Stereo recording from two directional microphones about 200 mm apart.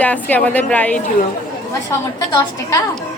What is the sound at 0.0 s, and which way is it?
A woman's voice, 5° left (ahead or behind).